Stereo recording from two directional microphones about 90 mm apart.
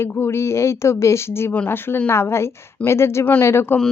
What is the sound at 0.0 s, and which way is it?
Speech, 25° left (ahead or behind).